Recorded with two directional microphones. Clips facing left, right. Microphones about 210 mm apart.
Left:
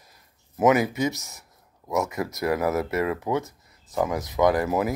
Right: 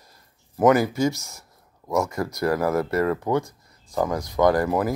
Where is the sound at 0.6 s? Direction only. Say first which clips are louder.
Right 2 dB; centre (ahead or behind).